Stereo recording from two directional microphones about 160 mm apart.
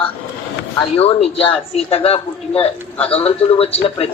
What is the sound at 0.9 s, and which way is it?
A man's voice, 35° left (ahead or behind).